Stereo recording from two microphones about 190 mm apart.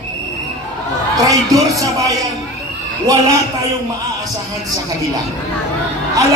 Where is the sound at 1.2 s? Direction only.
20° right (ahead or behind).